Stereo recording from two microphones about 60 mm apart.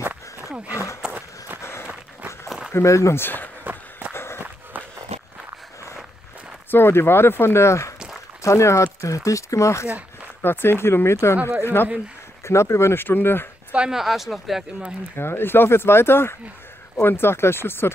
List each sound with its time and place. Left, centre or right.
1.0 s run: centre
1.6 s a sound: left
2.7 s speech: left
3.2 s speech: left
3.7 s run: right
4.1 s walk: left
6.7 s speech: left
8.8 s speech: left
10.4 s speech: left
12.4 s speech: left
13.7 s a sound: centre
13.9 s speech: centre
15.1 s speech: left